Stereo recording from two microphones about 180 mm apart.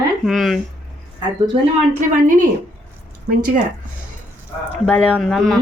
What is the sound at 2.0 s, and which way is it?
A woman's voice, 50° right (ahead or behind).